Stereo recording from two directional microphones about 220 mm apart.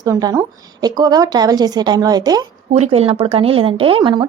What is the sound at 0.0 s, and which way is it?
A woman's voice, 15° right (ahead or behind).